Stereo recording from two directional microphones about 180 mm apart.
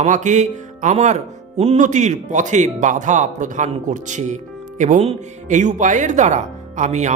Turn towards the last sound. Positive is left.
turn(degrees=-40)  # may be behind; listen again after turning